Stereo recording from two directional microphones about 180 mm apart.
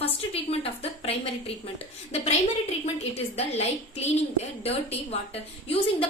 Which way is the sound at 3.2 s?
35° left (ahead or behind).